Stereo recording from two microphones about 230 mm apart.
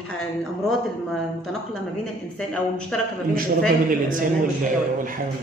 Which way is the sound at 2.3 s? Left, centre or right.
Centre.